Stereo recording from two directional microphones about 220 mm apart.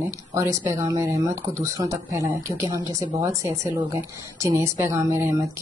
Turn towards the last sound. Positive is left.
turn(degrees=-10)  # may be behind; listen again after turning